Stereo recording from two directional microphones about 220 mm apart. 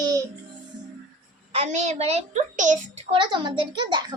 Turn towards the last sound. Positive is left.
turn(degrees=-20)  # may be behind; listen again after turning